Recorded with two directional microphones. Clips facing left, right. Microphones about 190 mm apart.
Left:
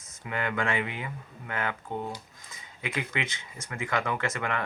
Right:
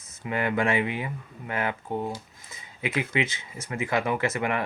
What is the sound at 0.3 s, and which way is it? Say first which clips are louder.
Speech: right 5 dB; 20° right (ahead or behind).